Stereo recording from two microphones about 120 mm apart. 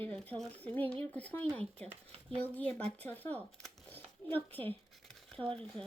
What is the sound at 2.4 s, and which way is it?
Speech, 15° left (ahead or behind).